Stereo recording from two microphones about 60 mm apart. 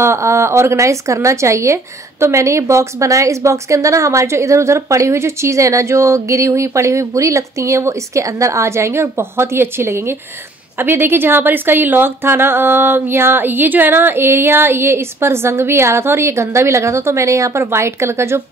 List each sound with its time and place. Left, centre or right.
0.0 s a woman's voice: right